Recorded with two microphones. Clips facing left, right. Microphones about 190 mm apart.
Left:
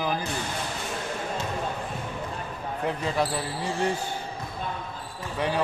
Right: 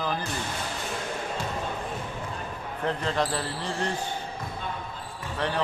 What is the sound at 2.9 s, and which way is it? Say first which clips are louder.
Speech: even; 10° left (ahead or behind).